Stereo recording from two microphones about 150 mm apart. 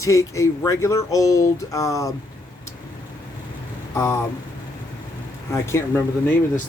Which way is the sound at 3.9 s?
20° left (ahead or behind).